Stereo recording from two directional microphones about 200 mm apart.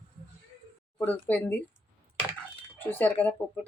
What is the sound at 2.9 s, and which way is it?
Speech, 10° left (ahead or behind).